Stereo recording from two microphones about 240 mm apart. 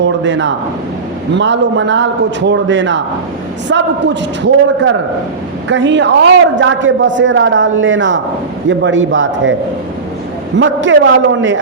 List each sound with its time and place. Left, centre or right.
0.2 s a man's voice: right
10.6 s a man's voice: right